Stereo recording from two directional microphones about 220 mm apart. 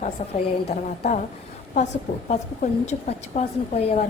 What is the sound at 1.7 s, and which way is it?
A woman's voice, 35° left (ahead or behind).